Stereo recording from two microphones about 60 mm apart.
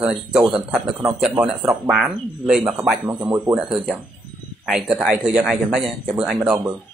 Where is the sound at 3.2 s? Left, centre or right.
Right.